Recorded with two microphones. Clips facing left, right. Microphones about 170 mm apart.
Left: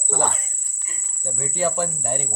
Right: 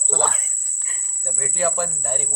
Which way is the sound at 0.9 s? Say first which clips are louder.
Left 1 dB; 15° left (ahead or behind).